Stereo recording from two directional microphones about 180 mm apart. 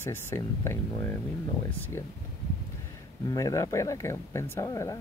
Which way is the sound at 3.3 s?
20° left (ahead or behind).